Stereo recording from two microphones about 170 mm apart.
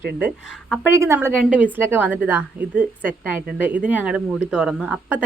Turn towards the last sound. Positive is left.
turn(degrees=-5)  # may be behind; listen again after turning